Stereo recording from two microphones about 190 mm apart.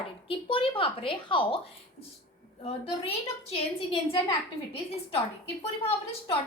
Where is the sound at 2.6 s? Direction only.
30° left (ahead or behind).